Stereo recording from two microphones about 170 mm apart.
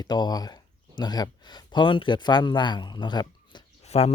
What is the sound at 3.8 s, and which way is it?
Speech, 40° left (ahead or behind).